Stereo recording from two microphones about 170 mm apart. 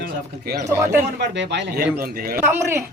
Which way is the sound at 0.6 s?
15° right (ahead or behind).